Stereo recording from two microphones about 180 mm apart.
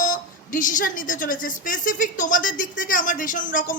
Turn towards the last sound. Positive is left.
turn(degrees=45)  # may be behind; listen again after turning